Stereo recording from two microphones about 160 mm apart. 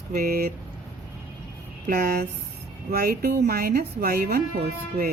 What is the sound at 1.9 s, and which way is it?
Speech, 70° right (ahead or behind).